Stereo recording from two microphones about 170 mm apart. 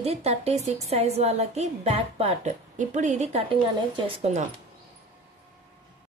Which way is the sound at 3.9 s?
30° right (ahead or behind).